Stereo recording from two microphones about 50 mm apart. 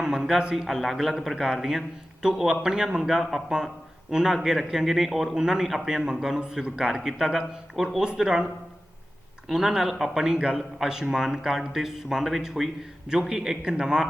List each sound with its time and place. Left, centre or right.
0.0 s a man's voice: centre
3.0 s a man's voice: centre
9.5 s speech: centre